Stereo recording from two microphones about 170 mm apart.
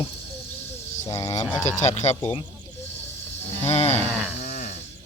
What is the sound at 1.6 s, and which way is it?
Speech, 45° left (ahead or behind).